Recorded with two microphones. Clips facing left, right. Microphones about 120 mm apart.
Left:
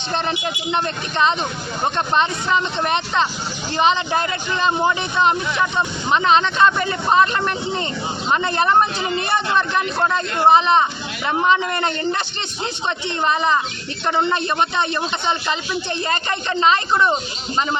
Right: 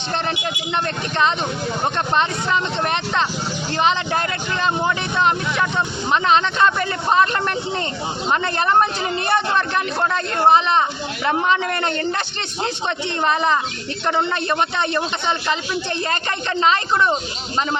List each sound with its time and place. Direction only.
0.1 s speech: 15° left (ahead or behind)
2.1 s speech: 15° left (ahead or behind)
10.3 s speech: 15° left (ahead or behind)
14.1 s speech: 15° left (ahead or behind)